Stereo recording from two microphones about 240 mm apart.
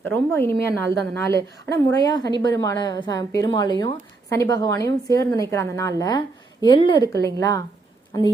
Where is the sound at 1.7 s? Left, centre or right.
Centre.